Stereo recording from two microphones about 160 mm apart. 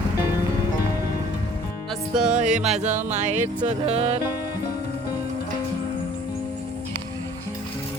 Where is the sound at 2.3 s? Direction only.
45° right (ahead or behind).